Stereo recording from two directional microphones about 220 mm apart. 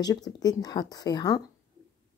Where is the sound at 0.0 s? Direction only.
15° left (ahead or behind).